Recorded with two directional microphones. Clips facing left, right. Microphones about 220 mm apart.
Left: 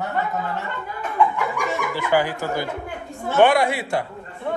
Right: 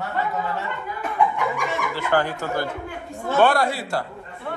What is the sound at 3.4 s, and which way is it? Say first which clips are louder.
Speech: left 2 dB; 20° left (ahead or behind).